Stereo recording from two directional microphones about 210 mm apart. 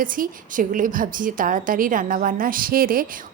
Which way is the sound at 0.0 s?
40° right (ahead or behind).